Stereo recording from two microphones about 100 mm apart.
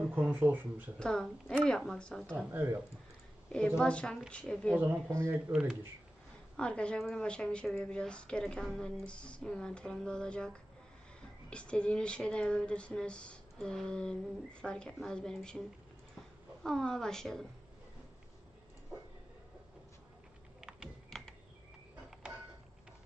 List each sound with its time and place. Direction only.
0.1 s speech: 15° right (ahead or behind)
0.9 s speech: 10° left (ahead or behind)
2.3 s speech: 20° right (ahead or behind)
3.8 s speech: 10° left (ahead or behind)
5.0 s speech: 25° right (ahead or behind)
5.5 s speech: 5° right (ahead or behind)
6.6 s speech: 10° left (ahead or behind)
16.6 s a woman's voice: 5° left (ahead or behind)
20.6 s typing: 5° right (ahead or behind)